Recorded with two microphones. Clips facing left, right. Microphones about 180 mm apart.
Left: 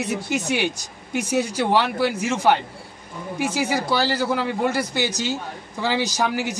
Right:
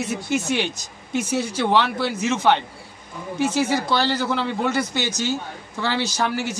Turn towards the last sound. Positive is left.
turn(degrees=15)  # may be behind; listen again after turning